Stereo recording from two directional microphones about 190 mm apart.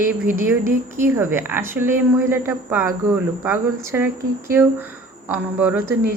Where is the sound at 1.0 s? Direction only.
10° right (ahead or behind).